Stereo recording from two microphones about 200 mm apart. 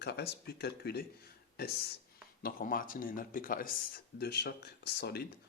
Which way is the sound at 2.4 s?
45° left (ahead or behind).